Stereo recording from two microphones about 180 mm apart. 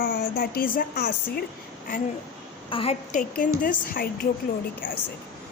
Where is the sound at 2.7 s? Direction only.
30° left (ahead or behind).